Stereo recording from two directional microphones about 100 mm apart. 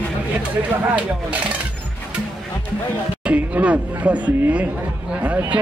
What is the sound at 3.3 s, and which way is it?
Speech, 15° right (ahead or behind).